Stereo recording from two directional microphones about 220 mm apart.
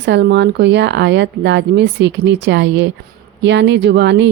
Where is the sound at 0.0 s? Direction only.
50° right (ahead or behind).